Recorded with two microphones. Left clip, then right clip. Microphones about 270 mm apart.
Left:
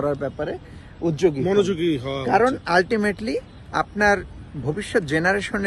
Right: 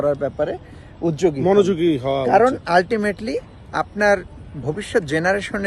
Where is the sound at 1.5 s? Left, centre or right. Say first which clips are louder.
Right 4 dB; right.